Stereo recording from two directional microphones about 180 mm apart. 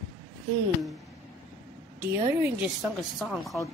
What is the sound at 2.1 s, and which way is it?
Speech, 10° right (ahead or behind).